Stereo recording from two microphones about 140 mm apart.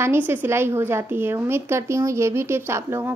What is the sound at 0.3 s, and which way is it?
Speech, 15° right (ahead or behind).